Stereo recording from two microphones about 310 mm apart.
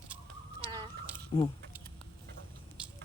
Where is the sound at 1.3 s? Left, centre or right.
Centre.